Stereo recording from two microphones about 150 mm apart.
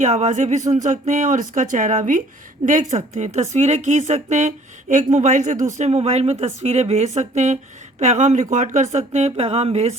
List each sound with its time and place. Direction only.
0.0 s speech: 50° right (ahead or behind)